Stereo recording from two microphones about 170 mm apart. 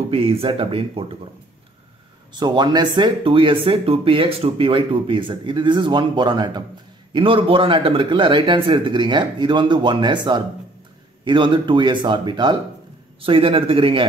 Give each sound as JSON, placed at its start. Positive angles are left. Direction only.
{"t": 0.1, "sound": "speech", "side_deg": -35}
{"t": 2.3, "sound": "speech", "side_deg": -25}